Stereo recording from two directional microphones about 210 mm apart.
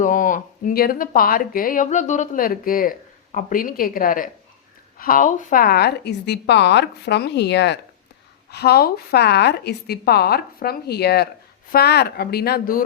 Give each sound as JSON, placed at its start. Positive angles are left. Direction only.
{"t": 0.0, "sound": "a woman's voice", "side_deg": 40}